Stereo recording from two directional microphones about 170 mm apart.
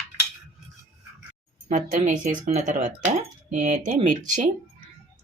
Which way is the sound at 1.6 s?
45° right (ahead or behind).